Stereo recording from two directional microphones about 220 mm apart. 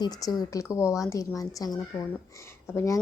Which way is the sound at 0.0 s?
20° left (ahead or behind).